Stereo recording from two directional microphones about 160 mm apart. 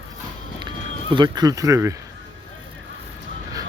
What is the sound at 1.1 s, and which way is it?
Speech, 25° right (ahead or behind).